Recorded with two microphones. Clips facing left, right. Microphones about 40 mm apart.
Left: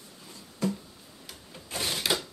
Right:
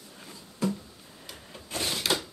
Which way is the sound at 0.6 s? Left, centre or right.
Centre.